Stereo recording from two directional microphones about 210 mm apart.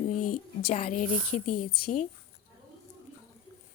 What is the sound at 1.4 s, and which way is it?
Speech, 90° left.